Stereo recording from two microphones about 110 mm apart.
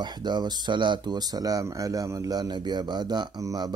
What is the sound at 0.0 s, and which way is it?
Speech, 40° right (ahead or behind).